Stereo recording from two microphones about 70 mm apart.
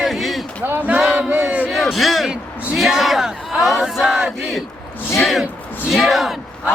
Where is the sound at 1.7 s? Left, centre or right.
Centre.